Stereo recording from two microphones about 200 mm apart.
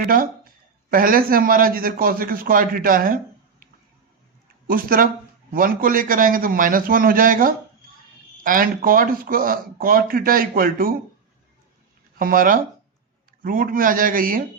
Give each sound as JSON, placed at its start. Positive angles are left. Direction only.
{"t": 0.0, "sound": "speech", "side_deg": -45}
{"t": 4.7, "sound": "speech", "side_deg": -45}
{"t": 12.2, "sound": "speech", "side_deg": -45}